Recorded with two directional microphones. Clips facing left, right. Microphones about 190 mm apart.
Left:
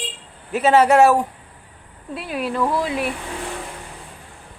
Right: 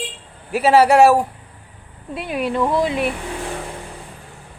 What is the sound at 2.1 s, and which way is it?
Speech, centre (ahead or behind).